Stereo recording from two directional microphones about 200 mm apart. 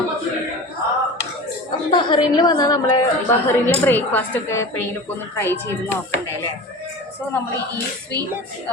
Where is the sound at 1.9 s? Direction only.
25° left (ahead or behind).